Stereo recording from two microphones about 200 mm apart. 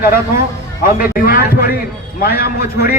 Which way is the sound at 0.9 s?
45° left (ahead or behind).